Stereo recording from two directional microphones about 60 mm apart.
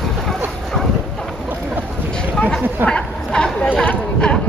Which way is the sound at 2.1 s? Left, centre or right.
Centre.